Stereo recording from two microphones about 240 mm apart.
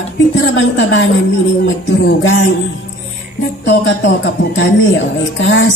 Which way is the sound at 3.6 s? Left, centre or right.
Left.